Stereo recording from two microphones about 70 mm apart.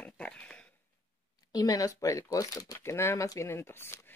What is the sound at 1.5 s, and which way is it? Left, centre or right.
Speech, left.